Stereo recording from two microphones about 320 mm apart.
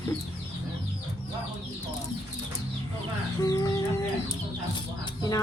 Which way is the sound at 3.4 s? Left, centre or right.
Centre.